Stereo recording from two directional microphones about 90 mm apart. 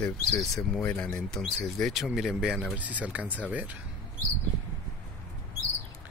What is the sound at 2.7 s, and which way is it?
Speech, 15° right (ahead or behind).